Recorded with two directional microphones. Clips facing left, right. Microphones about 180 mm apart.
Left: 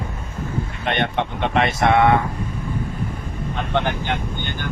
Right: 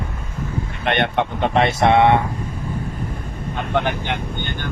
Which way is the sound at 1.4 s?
35° right (ahead or behind).